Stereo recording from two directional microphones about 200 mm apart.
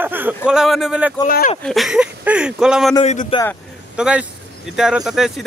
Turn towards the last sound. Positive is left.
turn(degrees=0)  # may be behind; listen again after turning